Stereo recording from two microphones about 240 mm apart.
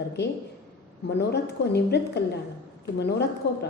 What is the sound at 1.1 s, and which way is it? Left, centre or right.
A woman's voice, left.